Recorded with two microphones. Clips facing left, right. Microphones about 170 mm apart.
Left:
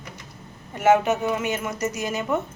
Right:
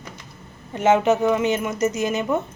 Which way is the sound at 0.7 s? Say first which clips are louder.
Right 2 dB; 20° right (ahead or behind).